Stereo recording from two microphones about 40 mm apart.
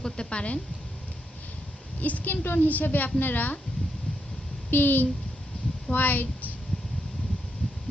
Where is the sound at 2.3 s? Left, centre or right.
Left.